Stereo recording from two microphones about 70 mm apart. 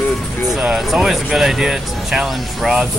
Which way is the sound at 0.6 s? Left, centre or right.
Centre.